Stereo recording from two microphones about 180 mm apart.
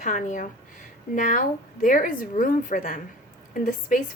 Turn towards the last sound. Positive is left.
turn(degrees=45)  # may be behind; listen again after turning